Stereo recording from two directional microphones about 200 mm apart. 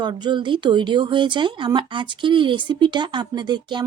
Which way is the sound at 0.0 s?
20° right (ahead or behind).